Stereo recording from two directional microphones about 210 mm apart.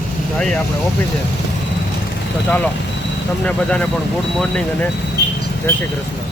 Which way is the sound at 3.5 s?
5° left (ahead or behind).